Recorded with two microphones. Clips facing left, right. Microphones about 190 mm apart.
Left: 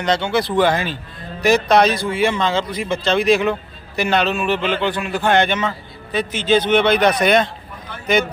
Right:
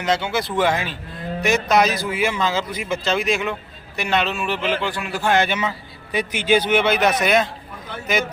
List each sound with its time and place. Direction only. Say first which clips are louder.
0.0 s a man's voice: left 3 dB; 5° right (ahead or behind)
4.6 s a man's voice: left 3 dB; 65° left (ahead or behind)
4.9 s a man's voice: left 3 dB; centre (ahead or behind)